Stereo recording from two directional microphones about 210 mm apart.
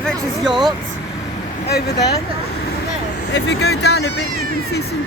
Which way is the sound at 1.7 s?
50° left (ahead or behind).